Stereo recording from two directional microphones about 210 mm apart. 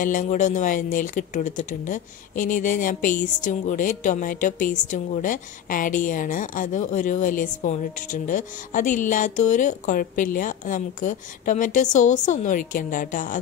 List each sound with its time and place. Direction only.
0.0 s a woman's voice: 40° left (ahead or behind)